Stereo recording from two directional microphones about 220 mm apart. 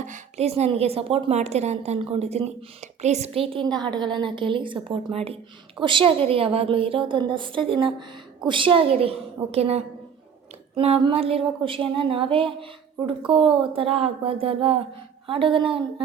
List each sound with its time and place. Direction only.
0.0 s a woman's voice: 30° right (ahead or behind)